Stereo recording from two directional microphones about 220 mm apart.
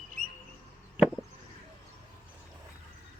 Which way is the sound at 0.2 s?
35° right (ahead or behind).